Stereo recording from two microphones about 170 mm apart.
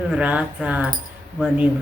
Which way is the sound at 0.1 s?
10° right (ahead or behind).